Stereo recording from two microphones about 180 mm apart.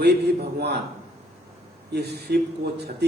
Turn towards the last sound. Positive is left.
turn(degrees=-65)  # may be behind; listen again after turning